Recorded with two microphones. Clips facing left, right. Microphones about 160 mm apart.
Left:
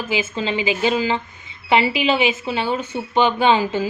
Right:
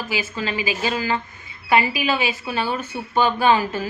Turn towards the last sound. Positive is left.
turn(degrees=20)  # may be behind; listen again after turning